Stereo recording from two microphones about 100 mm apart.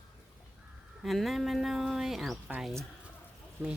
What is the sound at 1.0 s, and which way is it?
Speech, centre (ahead or behind).